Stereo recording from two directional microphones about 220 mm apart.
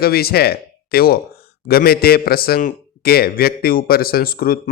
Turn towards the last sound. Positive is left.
turn(degrees=40)  # may be behind; listen again after turning